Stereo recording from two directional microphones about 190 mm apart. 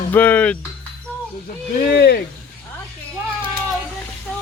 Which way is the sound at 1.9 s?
60° left (ahead or behind).